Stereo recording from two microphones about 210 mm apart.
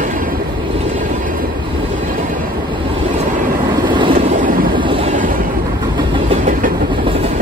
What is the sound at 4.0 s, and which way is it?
Vehicle, 30° right (ahead or behind).